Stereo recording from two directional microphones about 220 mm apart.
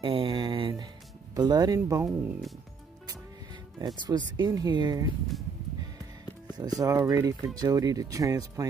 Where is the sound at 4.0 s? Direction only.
20° right (ahead or behind).